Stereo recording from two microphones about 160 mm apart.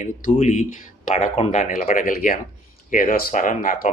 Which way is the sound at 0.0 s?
50° left (ahead or behind).